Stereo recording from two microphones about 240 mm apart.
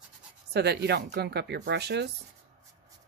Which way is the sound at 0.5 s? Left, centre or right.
Right.